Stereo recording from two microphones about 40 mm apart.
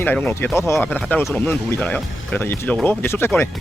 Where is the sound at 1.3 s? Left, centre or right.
Left.